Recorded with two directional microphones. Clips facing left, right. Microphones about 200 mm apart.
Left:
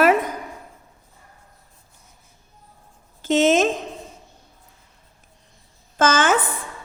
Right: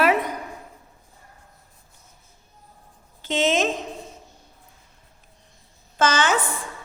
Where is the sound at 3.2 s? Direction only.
45° left (ahead or behind).